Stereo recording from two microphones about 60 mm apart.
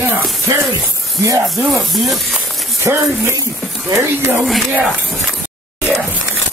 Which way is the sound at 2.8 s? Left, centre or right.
Right.